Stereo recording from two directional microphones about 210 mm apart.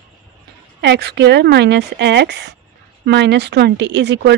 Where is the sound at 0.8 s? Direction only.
55° right (ahead or behind).